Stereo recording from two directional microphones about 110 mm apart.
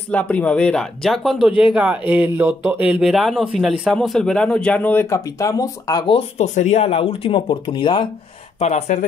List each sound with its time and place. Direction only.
0.1 s a man's voice: 15° left (ahead or behind)
5.1 s speech: 30° left (ahead or behind)
6.3 s speech: 90° left; by 8.1 s 50° left (ahead or behind)
8.5 s speech: 80° left